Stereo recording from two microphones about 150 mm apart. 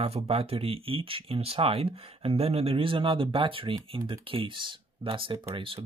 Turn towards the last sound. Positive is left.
turn(degrees=-35)  # may be behind; listen again after turning